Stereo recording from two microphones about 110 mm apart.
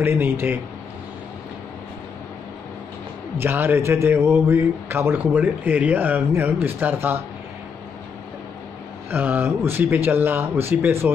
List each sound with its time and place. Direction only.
0.0 s speech: 20° right (ahead or behind)
3.3 s a man's voice: 20° right (ahead or behind)
9.1 s speech: 15° right (ahead or behind)